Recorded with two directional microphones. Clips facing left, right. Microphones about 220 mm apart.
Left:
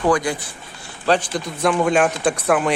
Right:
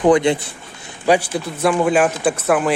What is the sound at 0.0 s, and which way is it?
Speech, 25° right (ahead or behind).